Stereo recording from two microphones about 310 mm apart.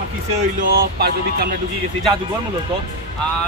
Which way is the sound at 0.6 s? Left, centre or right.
Right.